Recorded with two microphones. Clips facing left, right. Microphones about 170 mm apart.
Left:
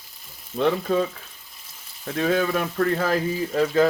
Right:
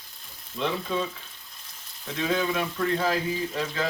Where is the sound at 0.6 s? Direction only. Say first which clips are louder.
Left 7 dB; 50° left (ahead or behind).